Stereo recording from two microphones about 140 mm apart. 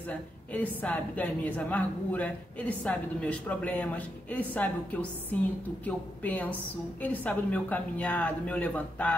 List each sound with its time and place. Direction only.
0.5 s a woman's voice: 10° left (ahead or behind)